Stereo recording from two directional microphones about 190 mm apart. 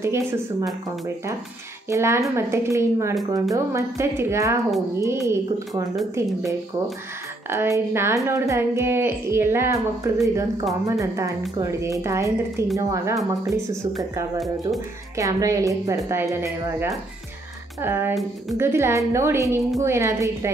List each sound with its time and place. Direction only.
0.0 s speech: 15° right (ahead or behind)
7.4 s speech: 15° right (ahead or behind)
15.1 s speech: 15° right (ahead or behind)